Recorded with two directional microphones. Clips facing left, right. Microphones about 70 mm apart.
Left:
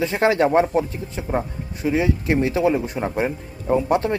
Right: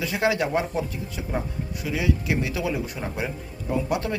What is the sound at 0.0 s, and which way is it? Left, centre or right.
Speech, left.